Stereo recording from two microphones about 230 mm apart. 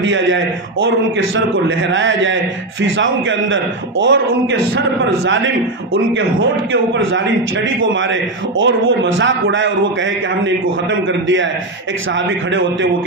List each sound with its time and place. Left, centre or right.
0.0 s a man's voice: right
6.7 s a man's voice: right